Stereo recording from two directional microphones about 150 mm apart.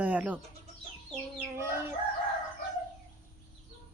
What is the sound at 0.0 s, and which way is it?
Bird, 10° right (ahead or behind).